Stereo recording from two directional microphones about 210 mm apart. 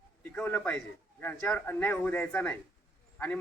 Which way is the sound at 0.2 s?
10° left (ahead or behind).